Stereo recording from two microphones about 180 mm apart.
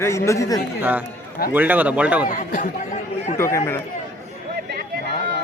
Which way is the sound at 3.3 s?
15° left (ahead or behind).